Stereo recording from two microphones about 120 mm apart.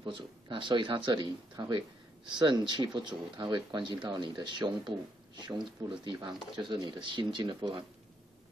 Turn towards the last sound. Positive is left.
turn(degrees=-40)  # may be behind; listen again after turning